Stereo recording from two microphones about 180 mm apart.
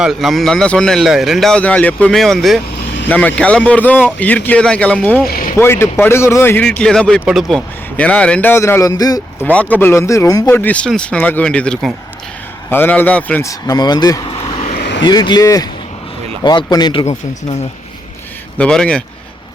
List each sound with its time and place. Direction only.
0.0 s a man's voice: centre (ahead or behind); by 9.5 s 20° left (ahead or behind)
9.5 s a man's voice: 5° left (ahead or behind)
14.3 s vehicle: 35° left (ahead or behind)
14.8 s vehicle: 75° left (ahead or behind)
15.0 s speech: 25° left (ahead or behind)
18.5 s a man's voice: 5° left (ahead or behind)